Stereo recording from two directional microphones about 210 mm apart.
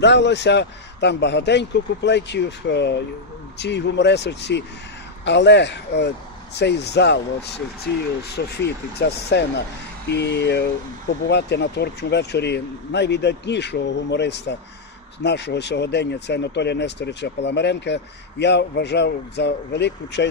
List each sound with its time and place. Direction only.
0.0 s speech: 55° left (ahead or behind)
8.6 s speech: 50° left (ahead or behind)